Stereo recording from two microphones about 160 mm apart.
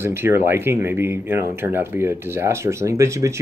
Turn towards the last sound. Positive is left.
turn(degrees=-20)  # may be behind; listen again after turning